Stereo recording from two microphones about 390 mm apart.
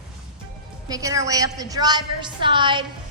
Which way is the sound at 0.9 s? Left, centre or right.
Centre.